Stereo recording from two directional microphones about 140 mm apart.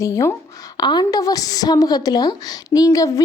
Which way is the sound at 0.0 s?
20° left (ahead or behind).